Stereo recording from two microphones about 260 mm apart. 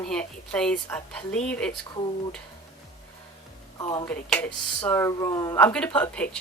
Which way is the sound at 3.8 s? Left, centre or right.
Centre.